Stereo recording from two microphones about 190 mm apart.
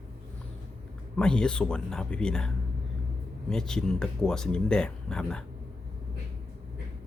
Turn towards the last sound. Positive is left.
turn(degrees=5)  # may be behind; listen again after turning